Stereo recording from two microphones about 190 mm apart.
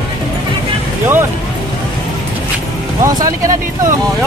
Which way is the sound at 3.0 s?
20° right (ahead or behind).